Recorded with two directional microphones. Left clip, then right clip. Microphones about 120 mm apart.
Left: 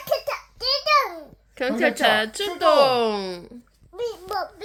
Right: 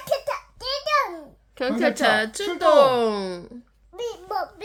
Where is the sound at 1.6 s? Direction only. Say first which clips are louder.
Left 1 dB; 15° right (ahead or behind).